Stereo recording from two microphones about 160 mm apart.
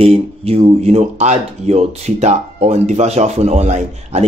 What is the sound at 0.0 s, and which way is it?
Speech, 40° right (ahead or behind).